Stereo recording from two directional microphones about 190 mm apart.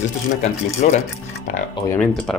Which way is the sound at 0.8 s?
40° left (ahead or behind).